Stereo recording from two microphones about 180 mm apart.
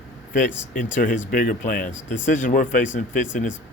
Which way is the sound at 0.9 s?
45° left (ahead or behind).